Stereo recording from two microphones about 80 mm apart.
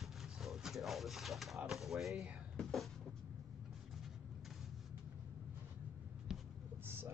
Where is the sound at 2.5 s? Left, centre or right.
Centre.